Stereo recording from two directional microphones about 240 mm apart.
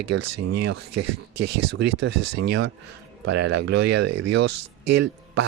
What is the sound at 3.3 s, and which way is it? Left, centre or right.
A man's voice, right.